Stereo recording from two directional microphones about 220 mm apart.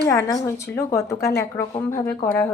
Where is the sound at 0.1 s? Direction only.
15° left (ahead or behind).